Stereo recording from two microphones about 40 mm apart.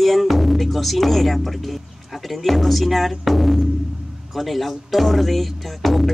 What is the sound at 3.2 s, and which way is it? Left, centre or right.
Speech, centre.